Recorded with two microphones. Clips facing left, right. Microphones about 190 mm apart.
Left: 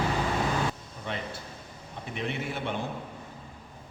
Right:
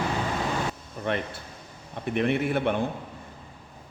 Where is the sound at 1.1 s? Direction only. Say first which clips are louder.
Right 7 dB; 60° right (ahead or behind).